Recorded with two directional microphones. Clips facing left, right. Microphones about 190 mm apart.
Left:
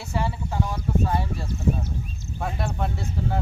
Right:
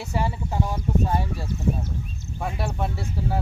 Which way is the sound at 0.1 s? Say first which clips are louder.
Even; 15° right (ahead or behind).